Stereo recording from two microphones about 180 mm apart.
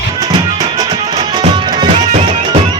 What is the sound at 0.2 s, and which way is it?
Music, 25° right (ahead or behind).